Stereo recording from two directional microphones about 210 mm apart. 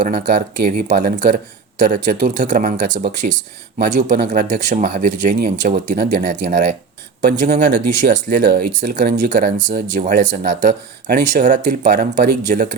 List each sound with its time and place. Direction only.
0.0 s speech: 35° right (ahead or behind)